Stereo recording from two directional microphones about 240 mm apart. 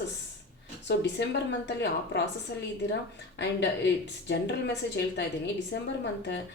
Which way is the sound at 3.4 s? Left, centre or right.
Left.